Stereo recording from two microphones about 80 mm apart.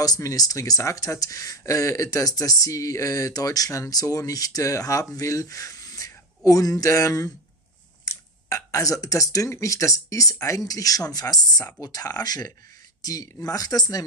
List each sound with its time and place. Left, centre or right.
0.0 s speech: left